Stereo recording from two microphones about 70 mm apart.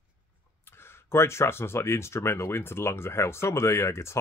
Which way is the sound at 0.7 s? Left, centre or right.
Left.